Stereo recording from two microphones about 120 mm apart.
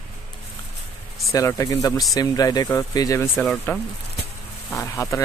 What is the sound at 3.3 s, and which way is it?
Speech, centre (ahead or behind).